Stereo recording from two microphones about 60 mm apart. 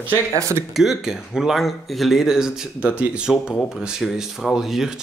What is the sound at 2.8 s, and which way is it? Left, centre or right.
Speech, right.